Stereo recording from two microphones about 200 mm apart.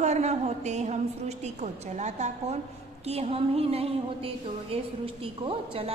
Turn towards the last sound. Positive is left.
turn(degrees=-30)  # may be behind; listen again after turning